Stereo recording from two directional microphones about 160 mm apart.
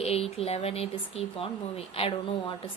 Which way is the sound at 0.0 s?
40° left (ahead or behind).